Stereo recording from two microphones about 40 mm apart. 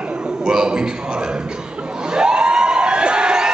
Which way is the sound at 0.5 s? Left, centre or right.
Centre.